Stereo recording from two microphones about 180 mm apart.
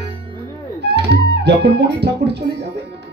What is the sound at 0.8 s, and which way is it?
Speech, 65° right (ahead or behind).